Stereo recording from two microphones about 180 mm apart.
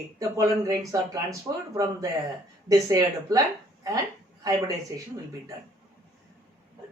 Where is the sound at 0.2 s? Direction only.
20° right (ahead or behind).